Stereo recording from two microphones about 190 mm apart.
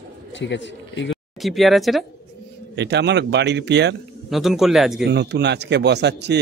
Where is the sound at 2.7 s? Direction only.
65° right (ahead or behind).